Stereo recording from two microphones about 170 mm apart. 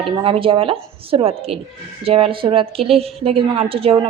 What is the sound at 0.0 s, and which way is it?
A woman's voice, 30° right (ahead or behind).